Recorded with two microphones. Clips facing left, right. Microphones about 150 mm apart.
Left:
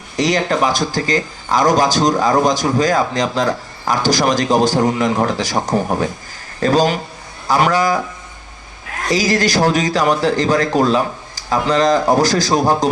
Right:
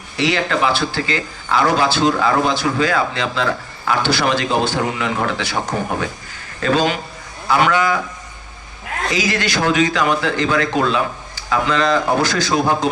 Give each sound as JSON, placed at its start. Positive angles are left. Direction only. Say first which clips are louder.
{"t": 0.2, "sound": "speech", "louder": "left 2 dB", "side_deg": 40}
{"t": 9.0, "sound": "speech", "louder": "left 5 dB", "side_deg": 35}